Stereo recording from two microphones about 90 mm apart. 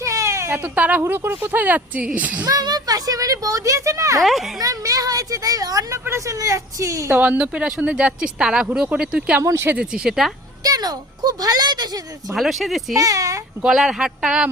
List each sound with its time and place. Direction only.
0.0 s cat: 35° right (ahead or behind)
0.8 s speech: 20° right (ahead or behind)
2.5 s speech: 45° right (ahead or behind)
4.2 s speech: centre (ahead or behind)
4.6 s speech: 40° right (ahead or behind)
7.1 s speech: 20° right (ahead or behind)
9.4 s speech: 40° right (ahead or behind)
9.7 s speech: 10° right (ahead or behind)
10.6 s a child's voice: 45° right (ahead or behind)
12.3 s speech: centre (ahead or behind)
13.0 s speech: 40° right (ahead or behind)
13.6 s speech: 5° right (ahead or behind)